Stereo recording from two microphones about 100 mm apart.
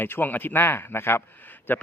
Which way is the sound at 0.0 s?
20° left (ahead or behind).